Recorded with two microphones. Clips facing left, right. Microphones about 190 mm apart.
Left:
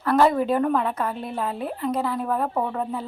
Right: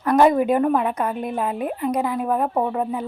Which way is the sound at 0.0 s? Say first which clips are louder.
Right 3 dB; 15° right (ahead or behind).